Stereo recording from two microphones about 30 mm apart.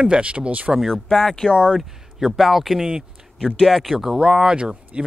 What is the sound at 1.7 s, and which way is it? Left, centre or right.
Speech, centre.